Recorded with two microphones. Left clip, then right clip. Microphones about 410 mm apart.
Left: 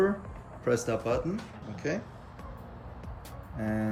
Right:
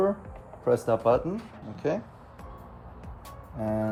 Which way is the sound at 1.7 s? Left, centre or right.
Centre.